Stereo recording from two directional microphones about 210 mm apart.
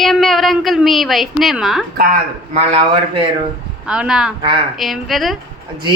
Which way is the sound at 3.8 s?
5° right (ahead or behind).